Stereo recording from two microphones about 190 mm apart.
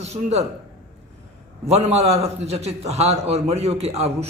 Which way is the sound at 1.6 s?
35° right (ahead or behind).